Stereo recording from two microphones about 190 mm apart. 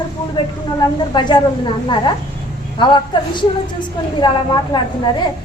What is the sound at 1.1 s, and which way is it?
Speech, 25° left (ahead or behind).